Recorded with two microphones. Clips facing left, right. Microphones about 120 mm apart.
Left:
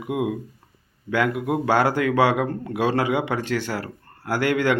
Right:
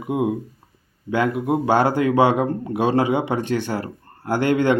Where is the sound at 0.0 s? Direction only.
30° right (ahead or behind).